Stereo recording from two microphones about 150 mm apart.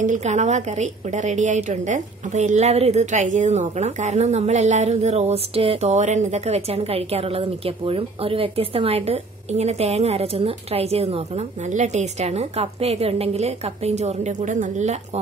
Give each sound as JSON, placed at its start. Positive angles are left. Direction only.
{"t": 0.0, "sound": "a woman's voice", "side_deg": -55}